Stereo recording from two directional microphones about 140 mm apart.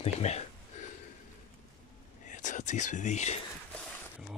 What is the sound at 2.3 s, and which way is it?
Whispering, 60° left (ahead or behind).